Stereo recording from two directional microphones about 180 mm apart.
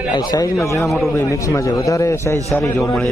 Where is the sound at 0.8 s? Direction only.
Centre (ahead or behind).